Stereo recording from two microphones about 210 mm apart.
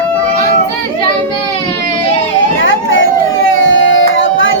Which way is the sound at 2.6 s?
65° left (ahead or behind).